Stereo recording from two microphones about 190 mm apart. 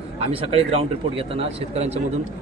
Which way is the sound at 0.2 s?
30° right (ahead or behind).